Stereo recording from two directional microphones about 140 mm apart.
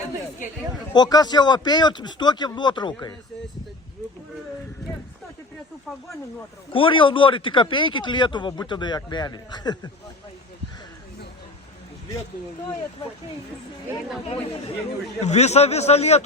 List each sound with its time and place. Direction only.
0.9 s speech: 30° left (ahead or behind)
6.7 s speech: 40° left (ahead or behind)
15.2 s a man's voice: 50° left (ahead or behind)